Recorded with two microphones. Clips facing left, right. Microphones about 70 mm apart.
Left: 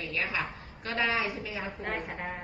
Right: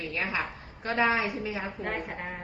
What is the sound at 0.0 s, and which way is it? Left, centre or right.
A woman's voice, right.